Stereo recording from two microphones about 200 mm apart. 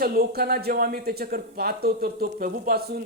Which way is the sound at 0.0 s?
50° right (ahead or behind).